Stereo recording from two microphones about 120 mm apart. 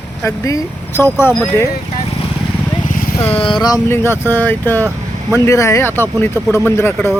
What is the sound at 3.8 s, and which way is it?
Speech, 20° left (ahead or behind).